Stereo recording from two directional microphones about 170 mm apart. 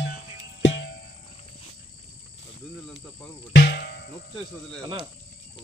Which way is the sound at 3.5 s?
70° left (ahead or behind).